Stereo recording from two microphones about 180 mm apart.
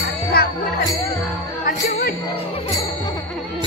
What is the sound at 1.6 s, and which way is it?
Speech, 55° left (ahead or behind).